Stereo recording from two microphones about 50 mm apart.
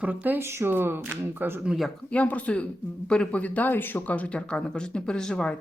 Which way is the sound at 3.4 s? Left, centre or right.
Left.